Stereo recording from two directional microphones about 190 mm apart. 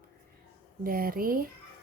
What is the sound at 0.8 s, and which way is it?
Speech, 50° right (ahead or behind).